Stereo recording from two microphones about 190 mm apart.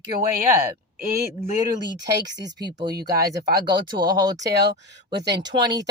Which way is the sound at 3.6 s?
25° right (ahead or behind).